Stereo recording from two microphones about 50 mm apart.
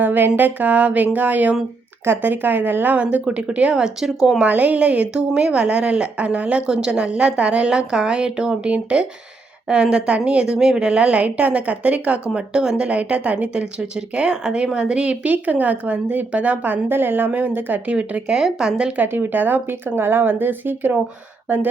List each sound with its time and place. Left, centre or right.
0.0 s a woman's voice: right; by 4.4 s centre
4.4 s speech: right
12.3 s a woman's voice: centre; by 17.9 s right
17.9 s speech: right
18.3 s speech: centre
18.9 s a woman's voice: right